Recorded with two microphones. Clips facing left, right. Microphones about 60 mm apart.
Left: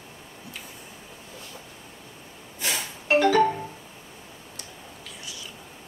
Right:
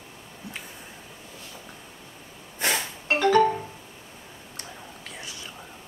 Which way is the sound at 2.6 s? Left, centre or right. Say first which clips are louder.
Right 4 dB; right.